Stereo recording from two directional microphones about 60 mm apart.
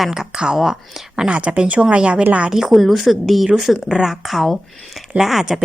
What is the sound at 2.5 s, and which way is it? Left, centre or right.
Speech, centre.